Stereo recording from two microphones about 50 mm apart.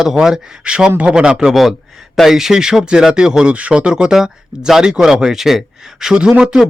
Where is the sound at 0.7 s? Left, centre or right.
Right.